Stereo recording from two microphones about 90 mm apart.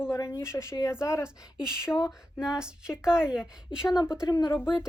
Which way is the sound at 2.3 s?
10° right (ahead or behind).